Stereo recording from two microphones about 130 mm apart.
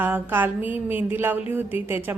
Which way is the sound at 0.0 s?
15° right (ahead or behind).